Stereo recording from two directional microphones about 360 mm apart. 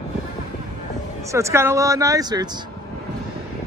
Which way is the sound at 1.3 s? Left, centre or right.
Centre.